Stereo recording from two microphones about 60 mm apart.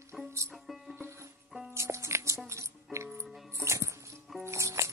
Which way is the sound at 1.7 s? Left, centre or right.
Right.